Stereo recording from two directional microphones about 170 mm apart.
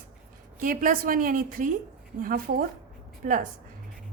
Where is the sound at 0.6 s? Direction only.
55° right (ahead or behind).